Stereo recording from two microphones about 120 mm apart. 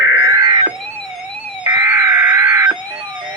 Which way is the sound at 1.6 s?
20° right (ahead or behind).